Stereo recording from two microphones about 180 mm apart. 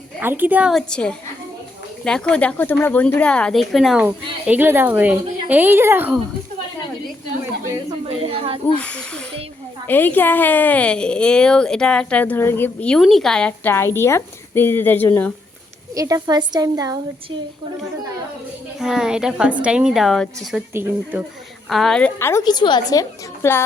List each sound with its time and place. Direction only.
0.2 s a woman's voice: 10° right (ahead or behind)
7.9 s a woman's voice: 30° right (ahead or behind)
8.6 s a woman's voice: 10° left (ahead or behind)
16.0 s a woman's voice: 20° right (ahead or behind)
18.8 s a woman's voice: 5° right (ahead or behind); by 23.6 s 15° left (ahead or behind)